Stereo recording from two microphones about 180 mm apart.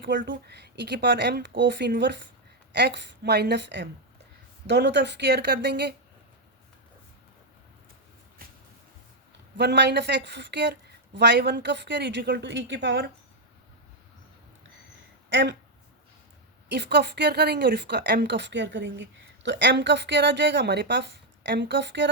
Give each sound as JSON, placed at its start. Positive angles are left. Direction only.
{"t": 0.0, "sound": "a woman's voice", "side_deg": -85}
{"t": 8.4, "sound": "a sound", "side_deg": -55}
{"t": 9.6, "sound": "a woman's voice", "side_deg": -70}
{"t": 15.3, "sound": "speech", "side_deg": -80}
{"t": 16.6, "sound": "a woman's voice", "side_deg": -70}